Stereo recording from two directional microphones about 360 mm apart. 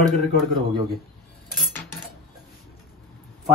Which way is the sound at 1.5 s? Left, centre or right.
Centre.